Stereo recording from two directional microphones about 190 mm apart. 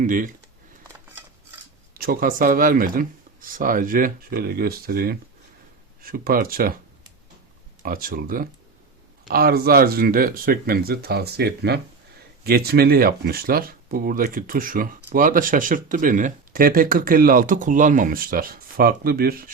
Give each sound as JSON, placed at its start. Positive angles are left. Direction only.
{"t": 0.0, "sound": "speech", "side_deg": -45}
{"t": 1.9, "sound": "speech", "side_deg": -50}
{"t": 7.8, "sound": "speech", "side_deg": -50}